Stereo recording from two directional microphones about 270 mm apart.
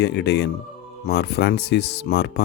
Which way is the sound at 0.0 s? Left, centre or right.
Left.